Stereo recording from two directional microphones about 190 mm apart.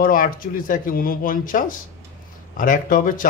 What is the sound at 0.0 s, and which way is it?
Speech, 45° left (ahead or behind).